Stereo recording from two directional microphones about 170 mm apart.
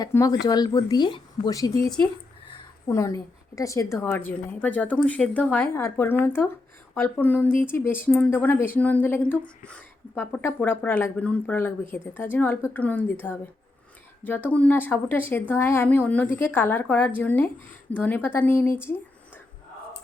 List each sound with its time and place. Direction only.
0.0 s a woman's voice: 20° left (ahead or behind)